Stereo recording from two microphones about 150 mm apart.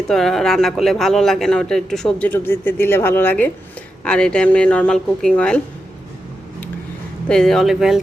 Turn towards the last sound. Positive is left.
turn(degrees=0)  # may be behind; listen again after turning